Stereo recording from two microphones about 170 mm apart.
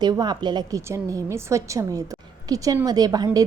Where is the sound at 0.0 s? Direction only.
25° right (ahead or behind).